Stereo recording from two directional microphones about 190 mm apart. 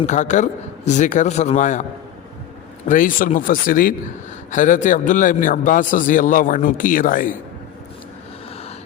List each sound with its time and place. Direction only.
0.0 s a man's voice: 40° left (ahead or behind)